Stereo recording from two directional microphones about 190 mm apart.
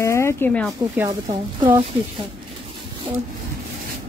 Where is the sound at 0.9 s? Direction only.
15° right (ahead or behind).